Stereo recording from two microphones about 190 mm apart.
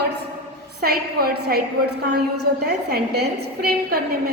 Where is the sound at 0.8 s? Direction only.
55° right (ahead or behind).